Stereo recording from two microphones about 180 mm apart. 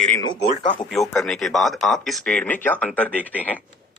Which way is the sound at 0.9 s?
Centre (ahead or behind).